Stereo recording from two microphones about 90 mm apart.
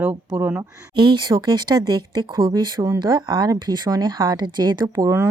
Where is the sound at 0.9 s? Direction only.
55° right (ahead or behind).